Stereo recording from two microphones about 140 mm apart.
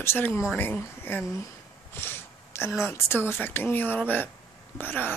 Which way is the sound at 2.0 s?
15° left (ahead or behind).